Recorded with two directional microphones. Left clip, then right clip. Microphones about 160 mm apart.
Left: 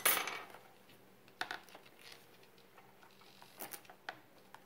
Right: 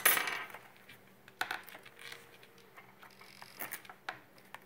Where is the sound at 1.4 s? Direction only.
10° right (ahead or behind).